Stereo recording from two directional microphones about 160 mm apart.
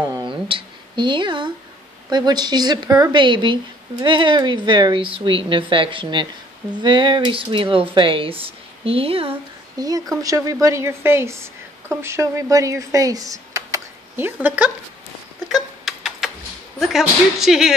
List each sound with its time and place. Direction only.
0.1 s a sound: 30° right (ahead or behind)
2.0 s a woman's voice: 25° right (ahead or behind)
9.3 s a woman's voice: 25° right (ahead or behind)
15.4 s tick-tock: centre (ahead or behind)
16.8 s speech: centre (ahead or behind)